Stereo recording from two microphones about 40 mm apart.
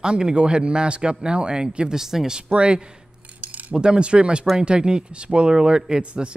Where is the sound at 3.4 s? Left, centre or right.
Right.